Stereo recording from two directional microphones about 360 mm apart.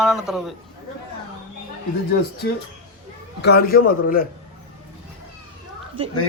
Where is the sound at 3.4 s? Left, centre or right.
Left.